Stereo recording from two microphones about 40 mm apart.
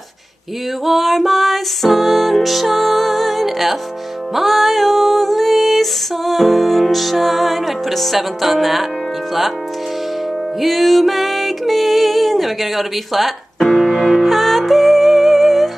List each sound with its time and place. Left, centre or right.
0.8 s music: centre
10.6 s music: centre